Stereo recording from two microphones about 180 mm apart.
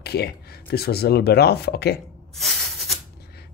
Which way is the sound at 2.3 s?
Centre (ahead or behind).